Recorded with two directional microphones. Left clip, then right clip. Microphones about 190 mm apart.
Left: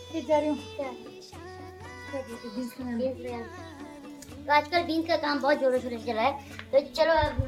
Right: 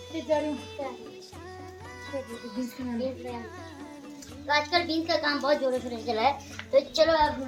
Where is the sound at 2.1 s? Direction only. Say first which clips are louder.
Even; centre (ahead or behind).